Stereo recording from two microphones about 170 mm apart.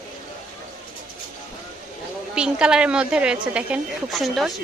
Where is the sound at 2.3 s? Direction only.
5° right (ahead or behind).